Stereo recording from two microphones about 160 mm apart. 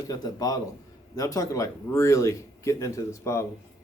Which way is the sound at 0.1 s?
20° left (ahead or behind).